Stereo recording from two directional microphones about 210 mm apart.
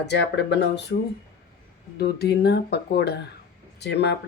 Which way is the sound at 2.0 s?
50° left (ahead or behind).